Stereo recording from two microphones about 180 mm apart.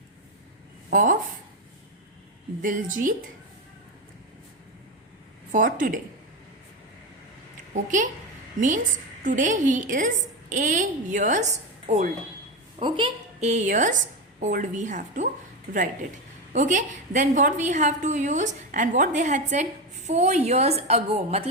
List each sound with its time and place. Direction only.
0.9 s speech: 50° right (ahead or behind)
2.6 s a woman's voice: 45° right (ahead or behind)
5.5 s a woman's voice: 45° right (ahead or behind)
7.7 s a woman's voice: 45° right (ahead or behind)
16.5 s a woman's voice: 45° right (ahead or behind)